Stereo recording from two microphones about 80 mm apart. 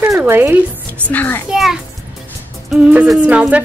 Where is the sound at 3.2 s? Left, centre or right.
Centre.